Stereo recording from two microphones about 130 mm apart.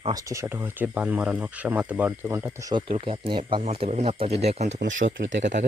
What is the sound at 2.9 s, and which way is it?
Speech, 40° right (ahead or behind).